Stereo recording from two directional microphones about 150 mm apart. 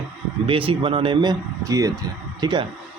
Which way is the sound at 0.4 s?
35° right (ahead or behind).